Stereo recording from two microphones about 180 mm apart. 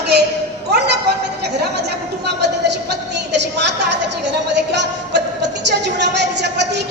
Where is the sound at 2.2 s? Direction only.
70° right (ahead or behind).